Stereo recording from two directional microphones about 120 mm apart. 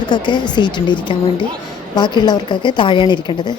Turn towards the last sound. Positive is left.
turn(degrees=40)  # may be behind; listen again after turning